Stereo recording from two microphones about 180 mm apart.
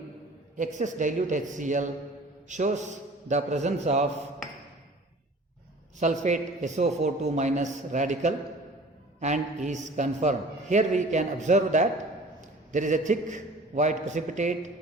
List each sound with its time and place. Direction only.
0.5 s a man's voice: 45° right (ahead or behind)
6.0 s a man's voice: 40° right (ahead or behind)